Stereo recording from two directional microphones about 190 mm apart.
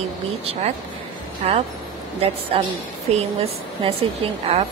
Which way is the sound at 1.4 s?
35° right (ahead or behind).